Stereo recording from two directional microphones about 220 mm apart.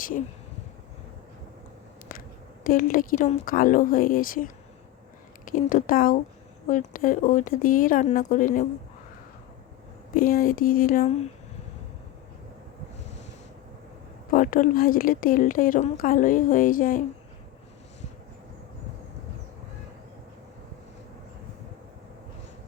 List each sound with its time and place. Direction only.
2.1 s a sound: 40° left (ahead or behind)
2.6 s a woman's voice: 40° left (ahead or behind)
10.2 s a woman's voice: 40° left (ahead or behind)
14.3 s a woman's voice: 40° left (ahead or behind)